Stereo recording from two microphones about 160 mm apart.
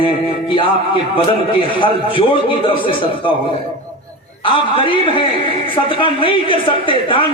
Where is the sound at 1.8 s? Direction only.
30° left (ahead or behind).